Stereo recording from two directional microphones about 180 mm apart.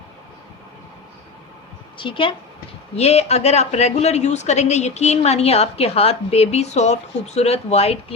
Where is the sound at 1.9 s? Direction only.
30° left (ahead or behind).